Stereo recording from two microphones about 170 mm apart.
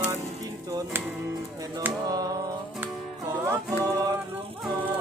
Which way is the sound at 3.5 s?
20° right (ahead or behind).